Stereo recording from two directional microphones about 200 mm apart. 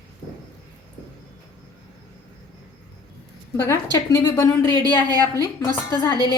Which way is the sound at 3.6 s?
15° left (ahead or behind).